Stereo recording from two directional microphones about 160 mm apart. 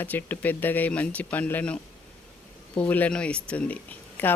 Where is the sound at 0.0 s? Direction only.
10° left (ahead or behind).